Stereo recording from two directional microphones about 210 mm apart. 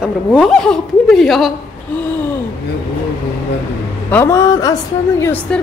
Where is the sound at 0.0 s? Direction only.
5° right (ahead or behind).